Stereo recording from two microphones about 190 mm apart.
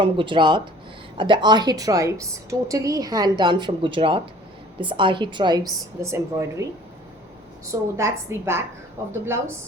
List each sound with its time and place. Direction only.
0.0 s a woman's voice: 25° right (ahead or behind)
7.7 s a woman's voice: 15° right (ahead or behind)